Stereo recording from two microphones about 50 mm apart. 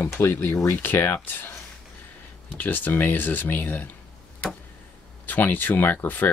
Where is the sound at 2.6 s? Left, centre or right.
Left.